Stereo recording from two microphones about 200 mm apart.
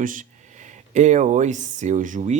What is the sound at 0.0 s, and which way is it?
Speech, 40° right (ahead or behind).